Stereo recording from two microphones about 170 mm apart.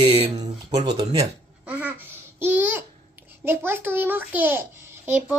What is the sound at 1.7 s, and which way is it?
A child's voice, 10° right (ahead or behind).